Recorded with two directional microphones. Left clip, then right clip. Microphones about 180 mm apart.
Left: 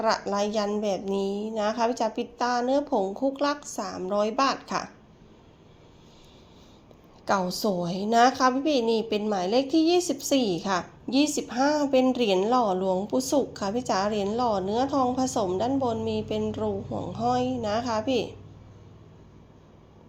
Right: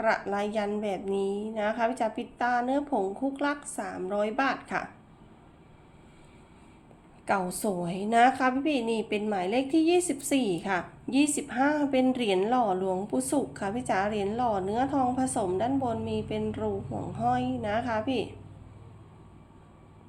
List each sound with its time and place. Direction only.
0.0 s a woman's voice: 20° left (ahead or behind)
7.3 s a woman's voice: 15° left (ahead or behind)